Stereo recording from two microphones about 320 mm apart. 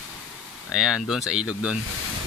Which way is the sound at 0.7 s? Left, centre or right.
Centre.